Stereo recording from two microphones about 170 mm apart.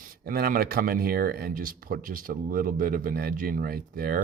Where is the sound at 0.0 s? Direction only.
55° right (ahead or behind).